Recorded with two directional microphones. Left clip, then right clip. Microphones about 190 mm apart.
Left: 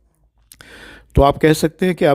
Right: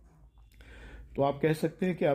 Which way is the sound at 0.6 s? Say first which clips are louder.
Left 14 dB; 40° left (ahead or behind).